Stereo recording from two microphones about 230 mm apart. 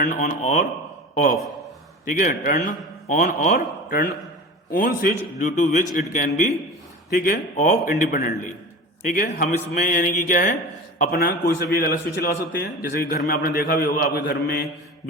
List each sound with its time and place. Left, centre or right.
0.0 s a man's voice: left
2.0 s a man's voice: left